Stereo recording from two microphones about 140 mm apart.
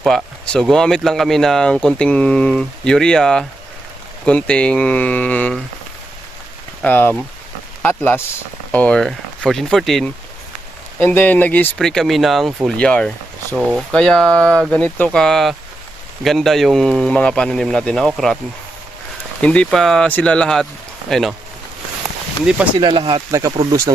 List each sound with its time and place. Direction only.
0.0 s speech: centre (ahead or behind)
6.8 s speech: 15° left (ahead or behind)
11.0 s speech: 10° left (ahead or behind)
13.6 s speech: 5° right (ahead or behind)
19.4 s speech: 10° left (ahead or behind)
22.5 s speech: 5° right (ahead or behind)
22.8 s speech: 35° right (ahead or behind)